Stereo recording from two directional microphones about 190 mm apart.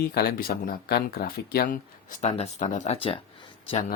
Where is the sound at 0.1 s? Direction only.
55° left (ahead or behind); by 3.2 s 30° left (ahead or behind).